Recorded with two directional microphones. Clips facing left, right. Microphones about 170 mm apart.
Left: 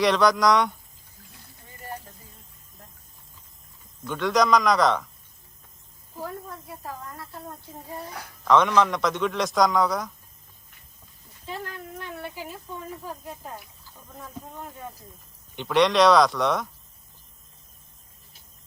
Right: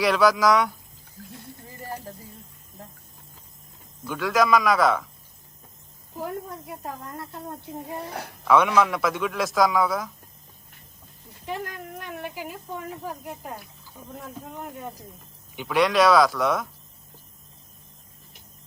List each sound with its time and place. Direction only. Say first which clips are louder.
0.0 s a man's voice: even; 5° right (ahead or behind)
4.0 s a man's voice: even; 5° right (ahead or behind)
6.1 s speech: right 3 dB; 20° right (ahead or behind)
8.4 s a man's voice: even; 10° right (ahead or behind)
11.4 s speech: right 3 dB; 15° right (ahead or behind)
15.5 s a man's voice: left 1 dB; 5° right (ahead or behind)